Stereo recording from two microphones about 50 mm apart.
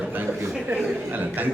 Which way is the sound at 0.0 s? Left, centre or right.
Right.